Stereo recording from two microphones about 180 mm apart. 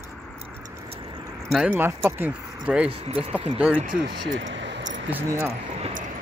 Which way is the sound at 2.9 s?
30° right (ahead or behind).